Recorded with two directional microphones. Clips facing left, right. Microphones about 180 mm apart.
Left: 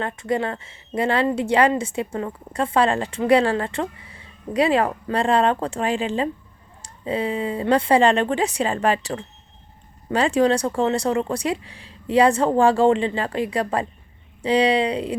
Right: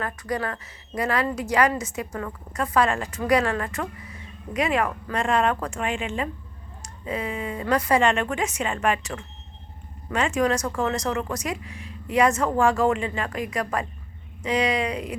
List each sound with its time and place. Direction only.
0.0 s a woman's voice: 25° left (ahead or behind)